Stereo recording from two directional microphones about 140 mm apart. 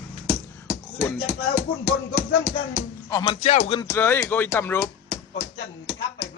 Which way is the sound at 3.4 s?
60° left (ahead or behind).